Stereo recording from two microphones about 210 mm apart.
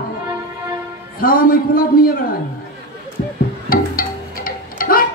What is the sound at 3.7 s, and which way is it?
Music, 45° left (ahead or behind).